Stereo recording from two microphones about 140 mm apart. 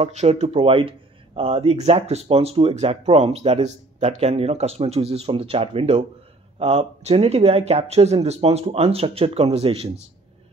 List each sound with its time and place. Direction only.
0.0 s speech: 55° right (ahead or behind)